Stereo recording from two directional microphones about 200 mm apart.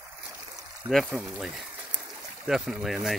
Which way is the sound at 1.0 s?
5° right (ahead or behind).